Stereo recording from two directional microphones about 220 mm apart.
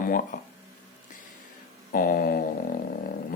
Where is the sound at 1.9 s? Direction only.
40° left (ahead or behind).